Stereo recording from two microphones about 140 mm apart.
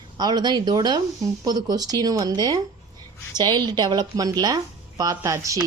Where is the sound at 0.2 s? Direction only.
30° right (ahead or behind).